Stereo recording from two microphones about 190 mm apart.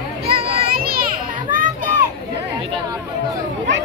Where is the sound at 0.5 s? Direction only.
50° right (ahead or behind).